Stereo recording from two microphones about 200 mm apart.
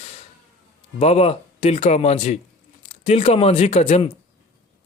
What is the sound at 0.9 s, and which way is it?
A man's voice, 30° left (ahead or behind).